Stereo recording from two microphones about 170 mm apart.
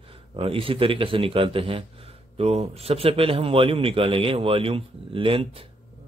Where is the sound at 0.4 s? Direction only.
30° right (ahead or behind).